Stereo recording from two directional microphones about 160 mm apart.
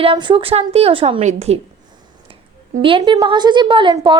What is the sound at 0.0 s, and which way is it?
A woman's voice, 30° right (ahead or behind).